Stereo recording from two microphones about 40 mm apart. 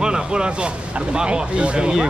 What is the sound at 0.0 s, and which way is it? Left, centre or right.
Speech, right.